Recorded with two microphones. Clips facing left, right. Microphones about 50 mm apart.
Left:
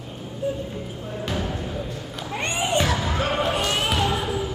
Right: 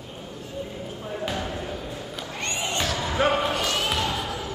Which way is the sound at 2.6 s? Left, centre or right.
Centre.